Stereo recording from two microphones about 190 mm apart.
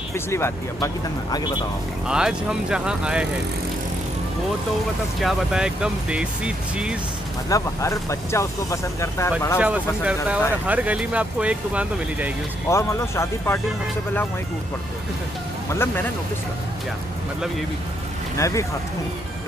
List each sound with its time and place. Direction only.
0.1 s speech: 15° left (ahead or behind)
2.0 s speech: 5° right (ahead or behind)
5.2 s speech: 5° right (ahead or behind)
7.4 s speech: 15° left (ahead or behind)
9.6 s speech: 5° right (ahead or behind)
12.6 s speech: 15° left (ahead or behind)
15.7 s speech: 15° left (ahead or behind)
18.4 s speech: 15° left (ahead or behind)